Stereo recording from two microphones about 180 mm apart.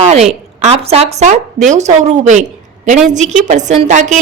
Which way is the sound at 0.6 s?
35° right (ahead or behind).